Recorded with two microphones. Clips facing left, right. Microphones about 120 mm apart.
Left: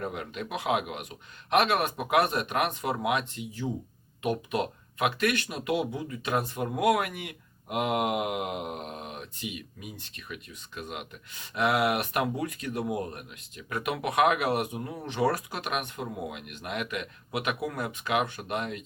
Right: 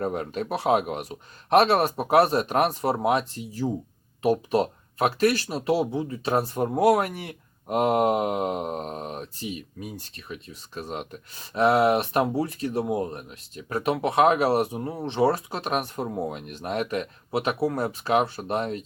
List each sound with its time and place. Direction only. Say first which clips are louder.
0.0 s speech: right 7 dB; 40° right (ahead or behind)